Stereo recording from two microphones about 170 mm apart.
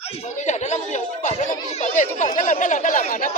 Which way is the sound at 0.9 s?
45° left (ahead or behind).